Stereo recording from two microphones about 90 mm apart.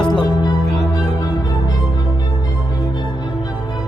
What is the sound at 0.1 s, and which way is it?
Music, 55° left (ahead or behind).